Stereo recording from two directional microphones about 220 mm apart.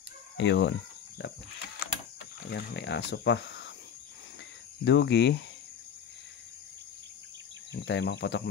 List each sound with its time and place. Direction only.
0.4 s speech: 55° left (ahead or behind)
2.5 s speech: 50° left (ahead or behind)
4.8 s speech: 50° left (ahead or behind)
7.7 s speech: 50° left (ahead or behind)